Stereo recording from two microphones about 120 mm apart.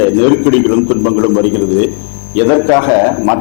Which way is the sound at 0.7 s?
25° left (ahead or behind).